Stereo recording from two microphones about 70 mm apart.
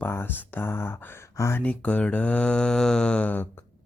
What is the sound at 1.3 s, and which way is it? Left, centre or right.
Speech, left.